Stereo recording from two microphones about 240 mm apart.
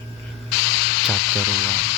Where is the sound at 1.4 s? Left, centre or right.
Left.